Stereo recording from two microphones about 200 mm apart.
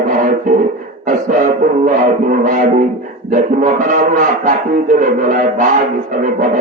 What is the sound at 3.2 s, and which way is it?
Livestock, 40° right (ahead or behind).